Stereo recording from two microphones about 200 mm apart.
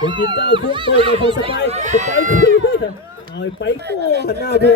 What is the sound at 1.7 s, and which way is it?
Speech, 35° right (ahead or behind).